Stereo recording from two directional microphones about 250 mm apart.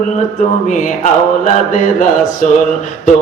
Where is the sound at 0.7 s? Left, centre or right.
Left.